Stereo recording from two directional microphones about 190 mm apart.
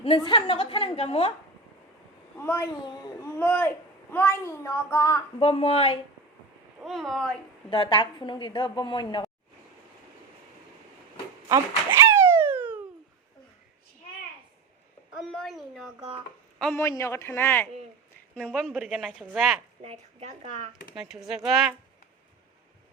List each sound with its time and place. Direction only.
0.2 s a woman's voice: 25° left (ahead or behind)
2.4 s a child's voice: 10° left (ahead or behind)
5.4 s a woman's voice: 30° left (ahead or behind)
6.8 s speech: centre (ahead or behind)
7.7 s a woman's voice: 25° left (ahead or behind)
11.4 s a sound: 15° right (ahead or behind)
15.3 s speech: centre (ahead or behind)
16.7 s a child's voice: 15° left (ahead or behind); by 19.5 s centre (ahead or behind)
19.8 s a woman's voice: 35° right (ahead or behind)
20.9 s speech: 5° right (ahead or behind)